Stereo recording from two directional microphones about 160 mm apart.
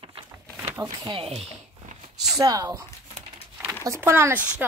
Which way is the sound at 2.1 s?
20° right (ahead or behind).